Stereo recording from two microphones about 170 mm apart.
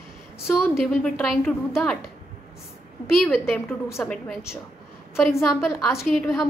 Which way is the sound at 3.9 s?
15° left (ahead or behind).